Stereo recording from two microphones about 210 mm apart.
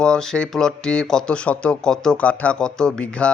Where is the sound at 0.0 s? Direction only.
5° left (ahead or behind).